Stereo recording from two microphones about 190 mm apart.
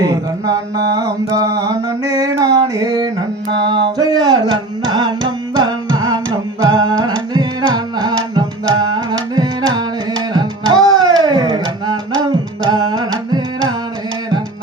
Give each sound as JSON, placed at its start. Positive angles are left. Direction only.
{"t": 0.0, "sound": "mantra", "side_deg": -20}
{"t": 3.5, "sound": "music", "side_deg": -25}
{"t": 10.8, "sound": "music", "side_deg": 0}
{"t": 11.0, "sound": "a sound", "side_deg": -20}
{"t": 12.2, "sound": "carnatic music", "side_deg": -20}